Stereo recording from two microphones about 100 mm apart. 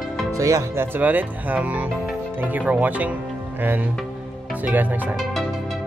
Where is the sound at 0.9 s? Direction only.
15° right (ahead or behind).